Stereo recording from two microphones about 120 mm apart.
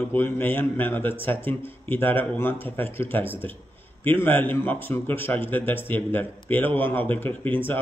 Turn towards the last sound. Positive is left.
turn(degrees=15)  # may be behind; listen again after turning